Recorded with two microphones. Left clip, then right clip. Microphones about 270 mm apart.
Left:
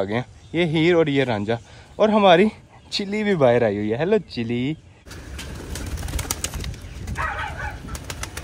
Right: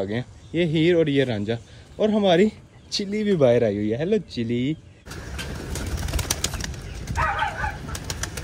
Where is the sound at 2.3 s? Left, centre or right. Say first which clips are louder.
Left 3 dB; centre.